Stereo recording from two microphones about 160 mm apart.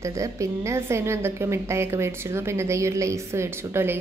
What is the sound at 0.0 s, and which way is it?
A woman's voice, 20° right (ahead or behind).